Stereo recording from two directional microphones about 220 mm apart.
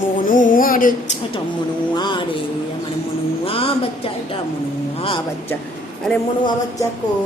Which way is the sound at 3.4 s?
25° left (ahead or behind).